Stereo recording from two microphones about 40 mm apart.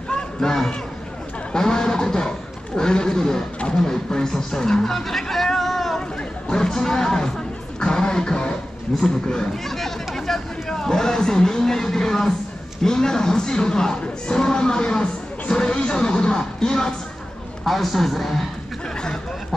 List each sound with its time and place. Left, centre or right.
0.1 s a sound: centre
6.5 s speech: centre
17.6 s a man's voice: centre